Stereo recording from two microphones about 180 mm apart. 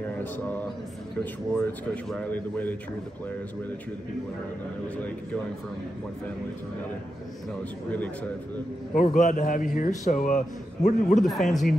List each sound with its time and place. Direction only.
0.2 s a man's voice: 10° left (ahead or behind)
4.9 s a man's voice: 10° left (ahead or behind)
7.9 s a man's voice: 10° left (ahead or behind)
8.9 s a man's voice: 45° left (ahead or behind)
11.2 s speech: centre (ahead or behind)